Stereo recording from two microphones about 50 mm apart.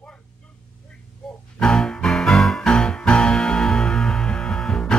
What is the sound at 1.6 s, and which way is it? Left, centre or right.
Music, centre.